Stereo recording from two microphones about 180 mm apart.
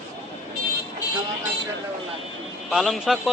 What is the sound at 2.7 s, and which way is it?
Speech, centre (ahead or behind).